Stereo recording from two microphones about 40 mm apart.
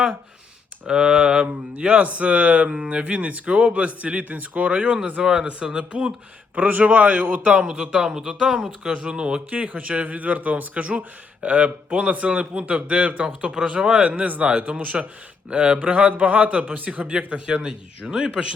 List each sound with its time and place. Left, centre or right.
0.9 s speech: right
5.2 s speech: centre
6.6 s speech: right
7.6 s speech: right
7.9 s speech: centre
8.9 s speech: right